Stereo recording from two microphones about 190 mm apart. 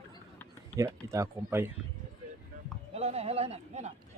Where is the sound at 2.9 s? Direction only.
35° right (ahead or behind).